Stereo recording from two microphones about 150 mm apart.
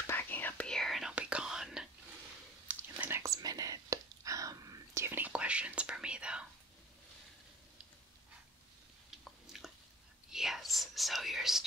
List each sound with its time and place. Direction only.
0.0 s whispering: 15° left (ahead or behind); by 6.4 s 5° right (ahead or behind)
9.1 s chewing: centre (ahead or behind)
10.3 s whispering: centre (ahead or behind)